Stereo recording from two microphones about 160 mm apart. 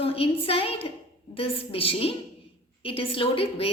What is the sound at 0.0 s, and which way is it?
A woman's voice, 35° left (ahead or behind).